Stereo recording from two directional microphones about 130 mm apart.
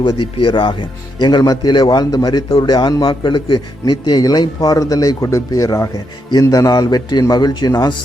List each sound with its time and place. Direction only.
0.3 s speech: 40° left (ahead or behind)